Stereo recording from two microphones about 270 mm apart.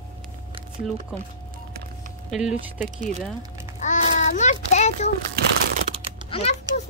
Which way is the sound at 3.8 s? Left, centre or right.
Left.